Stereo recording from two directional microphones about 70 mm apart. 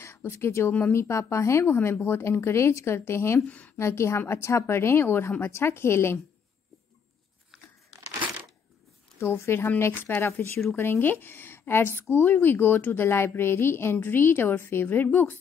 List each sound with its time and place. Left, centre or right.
0.0 s a woman's voice: left
3.4 s a woman's voice: centre
3.7 s a woman's voice: left
9.2 s a woman's voice: left